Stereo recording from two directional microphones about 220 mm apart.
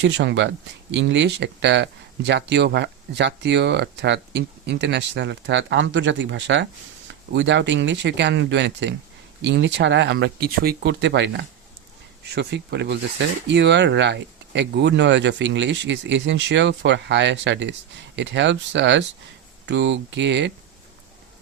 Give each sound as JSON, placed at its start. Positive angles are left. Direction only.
{"t": 0.0, "sound": "speech", "side_deg": -55}